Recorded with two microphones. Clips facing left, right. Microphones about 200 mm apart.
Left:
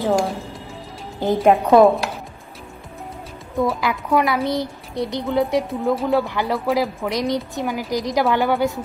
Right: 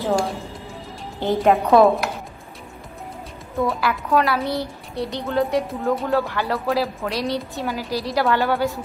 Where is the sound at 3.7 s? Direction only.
15° left (ahead or behind).